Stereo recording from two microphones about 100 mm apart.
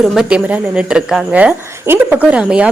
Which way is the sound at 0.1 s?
5° right (ahead or behind).